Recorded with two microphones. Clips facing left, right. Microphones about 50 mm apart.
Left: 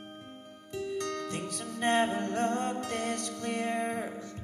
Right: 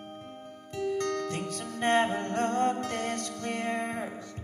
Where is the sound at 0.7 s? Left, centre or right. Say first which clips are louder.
Right 4 dB; right.